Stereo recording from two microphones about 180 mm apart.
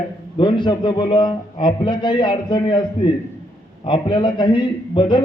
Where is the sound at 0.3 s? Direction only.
25° left (ahead or behind).